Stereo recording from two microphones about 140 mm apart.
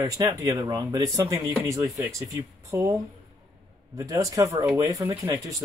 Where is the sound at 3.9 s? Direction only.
25° right (ahead or behind).